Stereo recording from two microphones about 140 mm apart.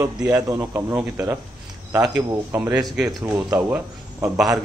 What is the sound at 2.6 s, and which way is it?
Speech, 5° right (ahead or behind).